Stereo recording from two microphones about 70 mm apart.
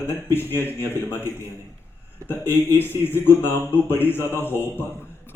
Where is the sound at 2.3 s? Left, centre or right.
Left.